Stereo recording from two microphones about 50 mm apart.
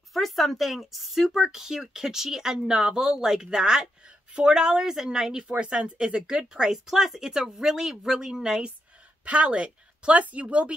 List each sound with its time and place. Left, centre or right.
0.1 s a woman's voice: centre; by 10.7 s right